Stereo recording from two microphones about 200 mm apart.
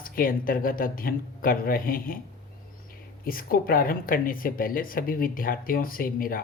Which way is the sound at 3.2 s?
45° left (ahead or behind).